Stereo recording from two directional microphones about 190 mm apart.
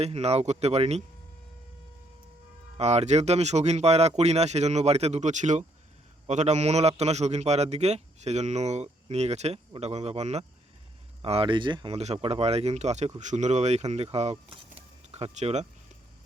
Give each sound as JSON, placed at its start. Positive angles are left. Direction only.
{"t": 0.0, "sound": "a man's voice", "side_deg": -35}
{"t": 2.7, "sound": "a man's voice", "side_deg": -35}
{"t": 14.8, "sound": "a sound", "side_deg": -35}